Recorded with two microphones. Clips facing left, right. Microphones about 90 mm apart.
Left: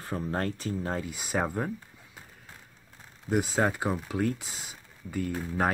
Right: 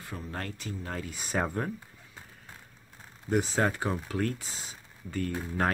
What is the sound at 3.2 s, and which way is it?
Speech, 10° left (ahead or behind).